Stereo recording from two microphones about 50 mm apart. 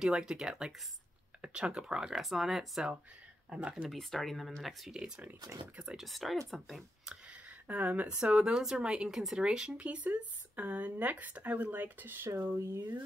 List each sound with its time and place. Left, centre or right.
0.0 s speech: centre
3.4 s speech: centre
3.9 s speech: centre
4.9 s speech: centre
5.9 s speech: centre
7.1 s a sound: right
8.4 s speech: centre
9.1 s speech: centre
9.4 s speech: centre; by 12.3 s right
12.4 s speech: right